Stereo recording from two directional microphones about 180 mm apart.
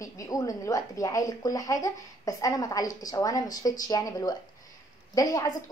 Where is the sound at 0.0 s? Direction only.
20° left (ahead or behind).